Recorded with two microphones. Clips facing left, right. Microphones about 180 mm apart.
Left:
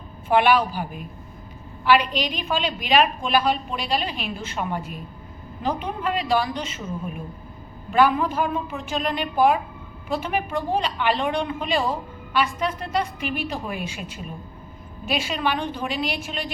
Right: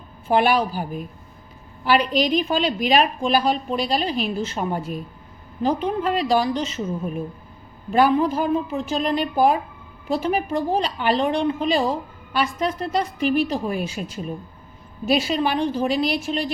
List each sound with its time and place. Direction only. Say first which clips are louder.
0.3 s a woman's voice: even; 40° right (ahead or behind)
7.9 s a woman's voice: right 2 dB; 35° right (ahead or behind)